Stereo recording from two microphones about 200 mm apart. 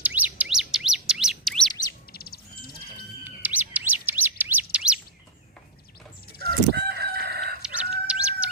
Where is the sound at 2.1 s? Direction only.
50° left (ahead or behind).